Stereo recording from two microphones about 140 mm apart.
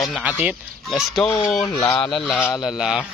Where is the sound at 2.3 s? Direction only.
10° left (ahead or behind).